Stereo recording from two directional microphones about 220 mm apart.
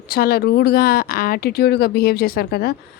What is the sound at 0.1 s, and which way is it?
Speech, 45° left (ahead or behind).